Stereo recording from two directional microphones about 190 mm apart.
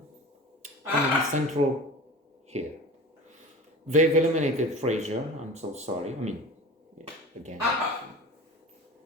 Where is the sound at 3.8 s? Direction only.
40° right (ahead or behind).